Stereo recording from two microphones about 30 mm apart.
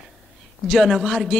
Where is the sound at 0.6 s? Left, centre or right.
Centre.